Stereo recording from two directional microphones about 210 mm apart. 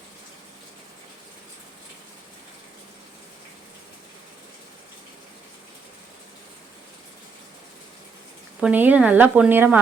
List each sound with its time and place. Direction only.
8.6 s a woman's voice: 10° right (ahead or behind)